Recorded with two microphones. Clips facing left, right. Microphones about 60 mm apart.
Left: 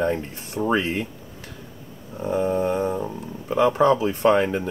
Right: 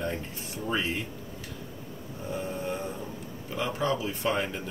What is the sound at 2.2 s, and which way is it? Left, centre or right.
Speech, left.